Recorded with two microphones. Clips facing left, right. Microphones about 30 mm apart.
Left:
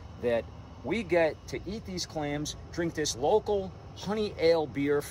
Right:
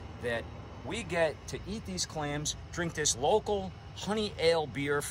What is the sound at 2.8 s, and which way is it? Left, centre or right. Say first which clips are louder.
Speech: left 4 dB; right.